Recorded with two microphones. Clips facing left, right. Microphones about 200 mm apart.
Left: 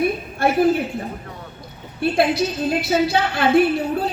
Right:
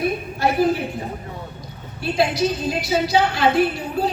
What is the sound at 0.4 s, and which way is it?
Speech, 55° left (ahead or behind).